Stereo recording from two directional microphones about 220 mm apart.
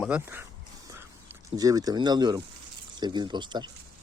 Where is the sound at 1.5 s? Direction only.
15° right (ahead or behind).